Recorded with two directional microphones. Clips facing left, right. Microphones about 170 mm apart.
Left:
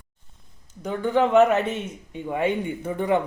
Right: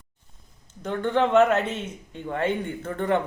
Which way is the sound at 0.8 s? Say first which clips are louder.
Left 1 dB; 10° left (ahead or behind).